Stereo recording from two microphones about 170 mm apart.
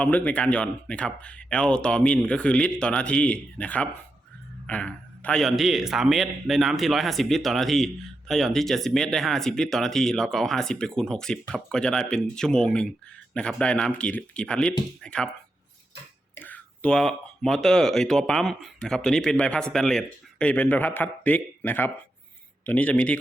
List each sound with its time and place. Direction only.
0.0 s speech: 10° left (ahead or behind)
16.3 s speech: 10° left (ahead or behind)